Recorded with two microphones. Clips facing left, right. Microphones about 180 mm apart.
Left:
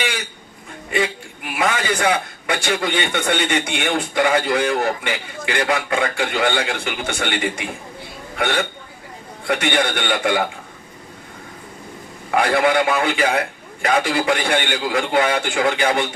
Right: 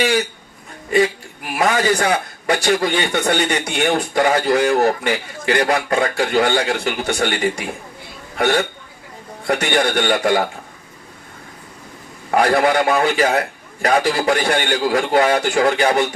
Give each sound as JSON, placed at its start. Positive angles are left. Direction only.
{"t": 0.9, "sound": "a man's voice", "side_deg": -40}
{"t": 12.3, "sound": "a man's voice", "side_deg": -40}